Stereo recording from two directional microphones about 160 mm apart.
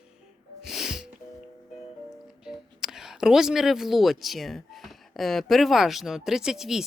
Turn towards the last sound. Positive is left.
turn(degrees=-5)  # may be behind; listen again after turning